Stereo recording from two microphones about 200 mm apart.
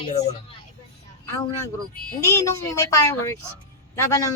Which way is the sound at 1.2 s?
15° left (ahead or behind).